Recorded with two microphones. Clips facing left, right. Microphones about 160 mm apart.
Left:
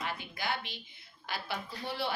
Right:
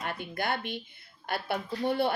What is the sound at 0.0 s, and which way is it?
A woman's voice, 55° right (ahead or behind).